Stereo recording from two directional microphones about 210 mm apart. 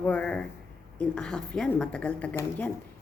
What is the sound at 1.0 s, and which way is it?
A woman's voice, 5° left (ahead or behind).